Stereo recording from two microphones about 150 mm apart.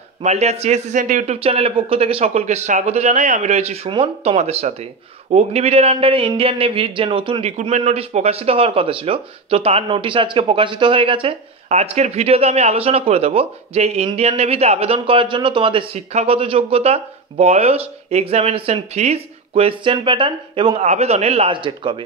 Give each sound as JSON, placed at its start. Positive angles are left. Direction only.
{"t": 0.2, "sound": "a man's voice", "side_deg": -45}
{"t": 20.8, "sound": "a man's voice", "side_deg": -45}